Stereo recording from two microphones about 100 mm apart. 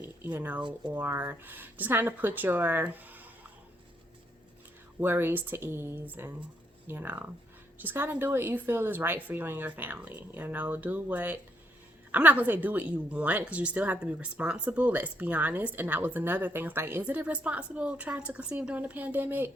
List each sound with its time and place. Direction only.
0.0 s a sound: 20° right (ahead or behind)
0.9 s a woman's voice: 20° right (ahead or behind)
4.9 s a woman's voice: 20° right (ahead or behind)